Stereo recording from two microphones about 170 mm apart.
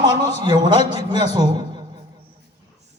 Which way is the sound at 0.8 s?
40° left (ahead or behind).